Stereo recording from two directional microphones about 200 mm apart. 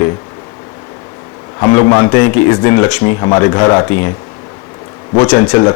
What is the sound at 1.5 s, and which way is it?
A man's voice, 20° left (ahead or behind).